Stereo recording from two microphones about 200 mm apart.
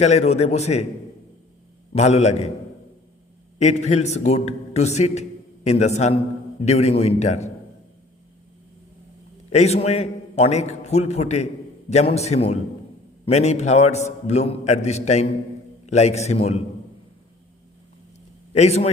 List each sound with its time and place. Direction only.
0.0 s a man's voice: 35° left (ahead or behind)
1.9 s a man's voice: 35° left (ahead or behind)
3.6 s a man's voice: 35° left (ahead or behind)
9.5 s a man's voice: 35° left (ahead or behind)
18.5 s a man's voice: 35° left (ahead or behind)